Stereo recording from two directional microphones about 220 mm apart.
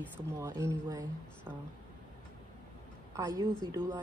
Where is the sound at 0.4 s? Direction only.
10° right (ahead or behind).